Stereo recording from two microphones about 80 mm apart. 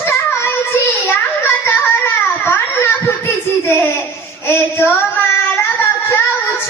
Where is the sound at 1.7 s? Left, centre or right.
Left.